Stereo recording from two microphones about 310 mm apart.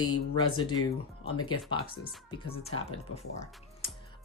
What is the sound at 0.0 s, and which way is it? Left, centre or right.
Speech, left.